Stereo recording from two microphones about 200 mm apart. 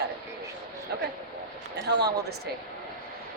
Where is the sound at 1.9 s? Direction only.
55° right (ahead or behind).